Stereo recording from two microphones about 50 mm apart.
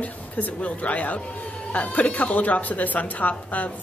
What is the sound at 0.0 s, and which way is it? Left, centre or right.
A woman's voice, left.